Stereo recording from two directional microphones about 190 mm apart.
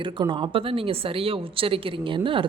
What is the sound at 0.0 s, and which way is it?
A man's voice, 25° right (ahead or behind).